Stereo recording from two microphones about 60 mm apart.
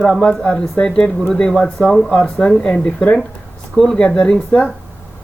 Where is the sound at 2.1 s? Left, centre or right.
Left.